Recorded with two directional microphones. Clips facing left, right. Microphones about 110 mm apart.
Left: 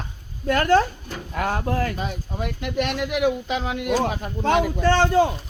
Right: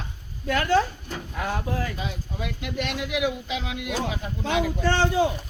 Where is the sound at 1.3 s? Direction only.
60° left (ahead or behind).